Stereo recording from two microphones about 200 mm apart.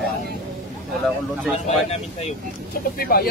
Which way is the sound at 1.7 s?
30° left (ahead or behind).